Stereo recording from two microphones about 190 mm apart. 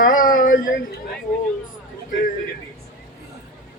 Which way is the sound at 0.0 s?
45° left (ahead or behind).